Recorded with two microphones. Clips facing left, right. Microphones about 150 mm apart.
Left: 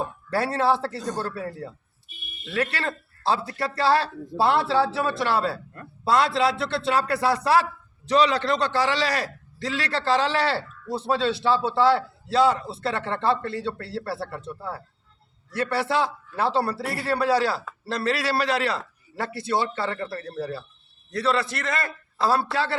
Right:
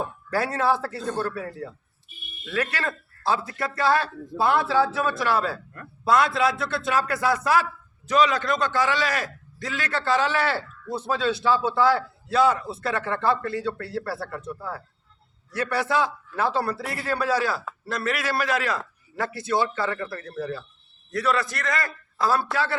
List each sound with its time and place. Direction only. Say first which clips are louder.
0.3 s a man's voice: left 1 dB; 30° left (ahead or behind)
1.0 s speech: right 2 dB; 15° left (ahead or behind)
1.4 s a man's voice: even; 30° left (ahead or behind)